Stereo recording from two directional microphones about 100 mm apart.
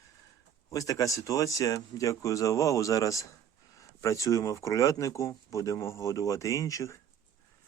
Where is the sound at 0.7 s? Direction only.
35° left (ahead or behind).